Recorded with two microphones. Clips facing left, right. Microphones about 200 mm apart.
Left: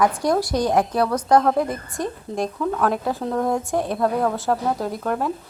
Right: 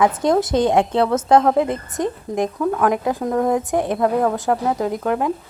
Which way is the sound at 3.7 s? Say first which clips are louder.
Right 3 dB; 20° right (ahead or behind).